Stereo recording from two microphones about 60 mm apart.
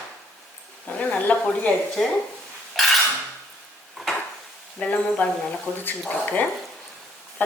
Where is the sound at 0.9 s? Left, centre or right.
Left.